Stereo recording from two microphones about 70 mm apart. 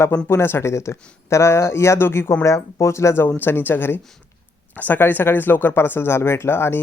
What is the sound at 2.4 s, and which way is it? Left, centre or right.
Speech, left.